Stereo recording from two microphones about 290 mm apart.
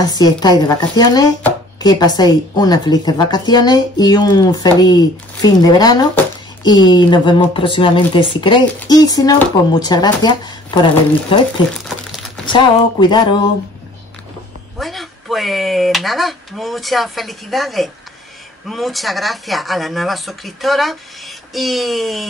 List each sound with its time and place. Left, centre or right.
0.0 s speech: centre
12.4 s speech: centre
14.8 s speech: centre